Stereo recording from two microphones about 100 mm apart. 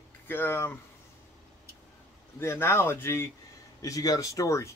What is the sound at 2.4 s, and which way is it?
Speech, 25° left (ahead or behind).